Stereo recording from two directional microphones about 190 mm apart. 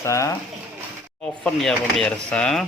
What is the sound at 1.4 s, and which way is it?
Speech, centre (ahead or behind).